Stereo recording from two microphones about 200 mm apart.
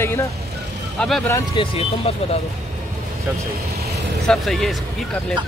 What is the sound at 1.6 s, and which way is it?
Speech, 30° left (ahead or behind).